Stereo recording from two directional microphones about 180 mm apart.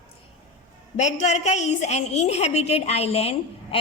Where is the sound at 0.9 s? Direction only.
40° left (ahead or behind).